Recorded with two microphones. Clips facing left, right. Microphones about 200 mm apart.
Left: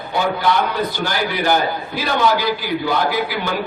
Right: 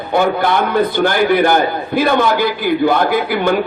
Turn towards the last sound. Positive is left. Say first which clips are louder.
# right 6 dB
turn(degrees=-55)  # may be behind; listen again after turning